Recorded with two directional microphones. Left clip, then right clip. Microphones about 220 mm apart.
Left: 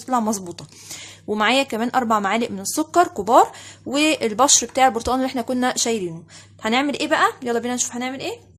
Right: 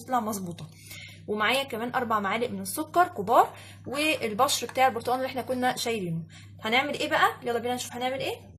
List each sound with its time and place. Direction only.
0.1 s a woman's voice: 40° left (ahead or behind)